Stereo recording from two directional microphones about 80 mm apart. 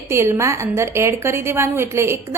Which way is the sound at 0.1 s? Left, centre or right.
Right.